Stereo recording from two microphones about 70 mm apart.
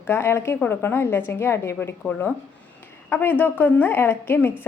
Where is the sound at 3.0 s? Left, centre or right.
Left.